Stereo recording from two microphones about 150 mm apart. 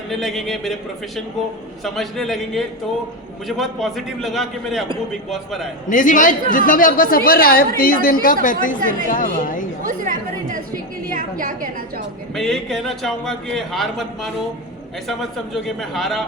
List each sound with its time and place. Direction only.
0.1 s a man's voice: centre (ahead or behind)
1.8 s a man's voice: centre (ahead or behind)
5.9 s a woman's voice: 60° left (ahead or behind)
9.8 s a woman's voice: 60° right (ahead or behind)
12.3 s a man's voice: centre (ahead or behind)